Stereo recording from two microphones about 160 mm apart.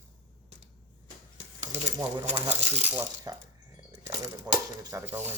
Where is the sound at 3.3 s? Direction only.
25° right (ahead or behind).